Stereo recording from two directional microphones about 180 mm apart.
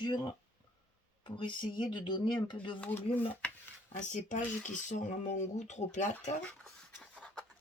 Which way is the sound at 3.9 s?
45° left (ahead or behind).